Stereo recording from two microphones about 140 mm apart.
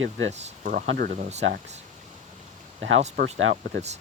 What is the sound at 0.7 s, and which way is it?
Speech, 90° right.